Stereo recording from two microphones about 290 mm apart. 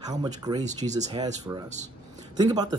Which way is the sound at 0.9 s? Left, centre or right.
Right.